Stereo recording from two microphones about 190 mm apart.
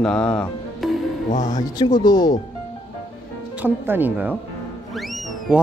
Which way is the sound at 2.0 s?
20° left (ahead or behind).